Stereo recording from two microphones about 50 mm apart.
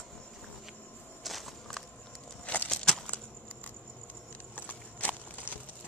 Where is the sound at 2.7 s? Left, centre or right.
Centre.